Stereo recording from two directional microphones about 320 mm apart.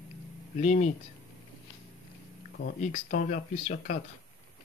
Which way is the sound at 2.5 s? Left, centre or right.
Left.